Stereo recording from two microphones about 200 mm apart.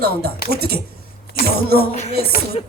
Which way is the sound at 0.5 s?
50° right (ahead or behind).